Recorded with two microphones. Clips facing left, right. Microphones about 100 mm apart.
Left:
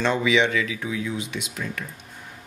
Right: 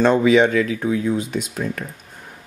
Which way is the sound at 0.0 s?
45° right (ahead or behind).